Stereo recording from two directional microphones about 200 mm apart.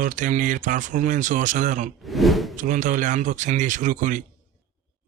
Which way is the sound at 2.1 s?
Centre (ahead or behind).